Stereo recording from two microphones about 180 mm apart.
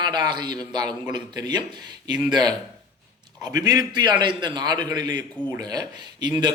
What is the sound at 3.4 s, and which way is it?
A man's voice, 20° right (ahead or behind).